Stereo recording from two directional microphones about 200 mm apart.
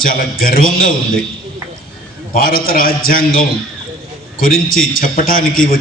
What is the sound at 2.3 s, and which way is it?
A man's voice, 45° left (ahead or behind).